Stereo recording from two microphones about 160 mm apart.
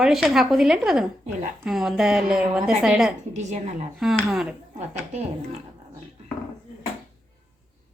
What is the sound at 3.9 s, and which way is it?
Speech, centre (ahead or behind).